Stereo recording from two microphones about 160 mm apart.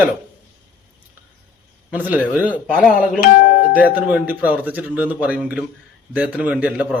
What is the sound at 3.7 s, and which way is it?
Speech, 10° right (ahead or behind).